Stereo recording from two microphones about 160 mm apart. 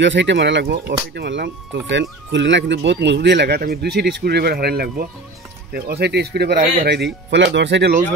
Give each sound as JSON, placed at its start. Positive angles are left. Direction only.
{"t": 0.2, "sound": "speech", "side_deg": -90}
{"t": 7.2, "sound": "speech", "side_deg": -90}